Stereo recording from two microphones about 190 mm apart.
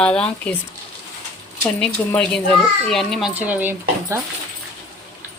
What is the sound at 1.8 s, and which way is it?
A woman's voice, 5° left (ahead or behind).